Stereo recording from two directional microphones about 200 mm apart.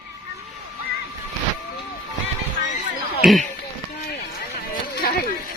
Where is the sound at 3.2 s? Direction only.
Centre (ahead or behind).